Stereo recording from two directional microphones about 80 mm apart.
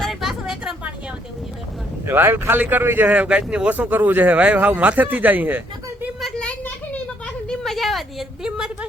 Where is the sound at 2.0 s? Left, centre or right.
Right.